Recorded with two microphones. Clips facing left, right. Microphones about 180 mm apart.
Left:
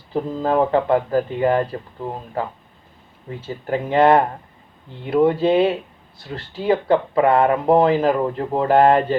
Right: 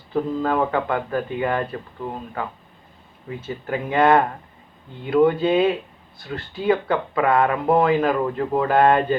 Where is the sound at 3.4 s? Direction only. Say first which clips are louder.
Left 3 dB; 30° left (ahead or behind).